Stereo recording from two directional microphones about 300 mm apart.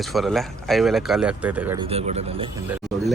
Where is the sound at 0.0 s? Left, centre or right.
Centre.